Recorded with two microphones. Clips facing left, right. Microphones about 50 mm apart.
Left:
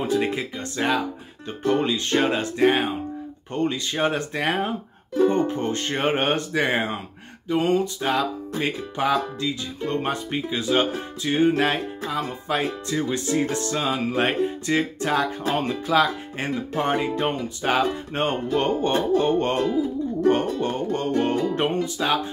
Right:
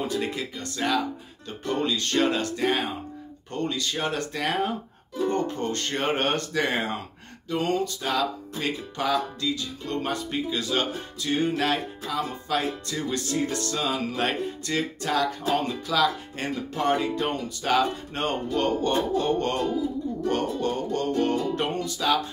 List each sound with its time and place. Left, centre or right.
0.0 s speech: left
1.6 s music: left
1.9 s speech: left